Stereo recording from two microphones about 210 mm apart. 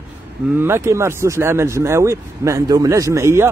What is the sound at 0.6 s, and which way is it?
Speech, 10° right (ahead or behind).